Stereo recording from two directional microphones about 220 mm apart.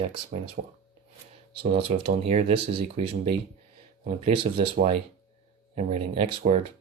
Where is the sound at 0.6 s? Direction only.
45° right (ahead or behind).